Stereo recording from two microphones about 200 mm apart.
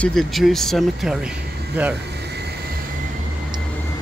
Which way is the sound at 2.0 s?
55° right (ahead or behind).